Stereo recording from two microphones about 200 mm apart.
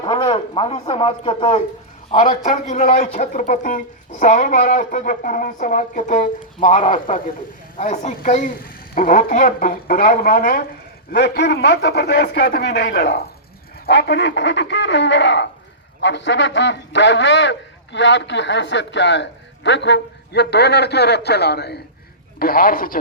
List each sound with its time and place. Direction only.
0.0 s speech: 25° left (ahead or behind)
2.0 s speech: 35° left (ahead or behind)